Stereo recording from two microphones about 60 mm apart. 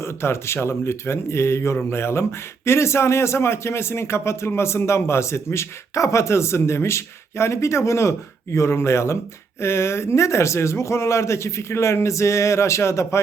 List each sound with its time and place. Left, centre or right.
0.0 s speech: left